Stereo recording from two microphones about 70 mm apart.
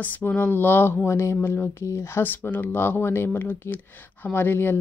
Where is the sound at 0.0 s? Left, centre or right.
Left.